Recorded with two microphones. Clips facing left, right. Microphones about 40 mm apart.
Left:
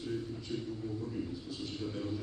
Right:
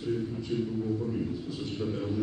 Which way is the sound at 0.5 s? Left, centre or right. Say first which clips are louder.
Right 9 dB; right.